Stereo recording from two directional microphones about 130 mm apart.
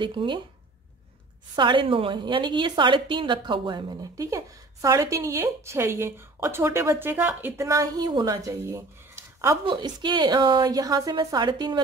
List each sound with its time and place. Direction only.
0.0 s a woman's voice: 35° right (ahead or behind)
1.5 s a woman's voice: 40° right (ahead or behind); by 9.6 s 20° right (ahead or behind)
9.7 s a woman's voice: 35° right (ahead or behind)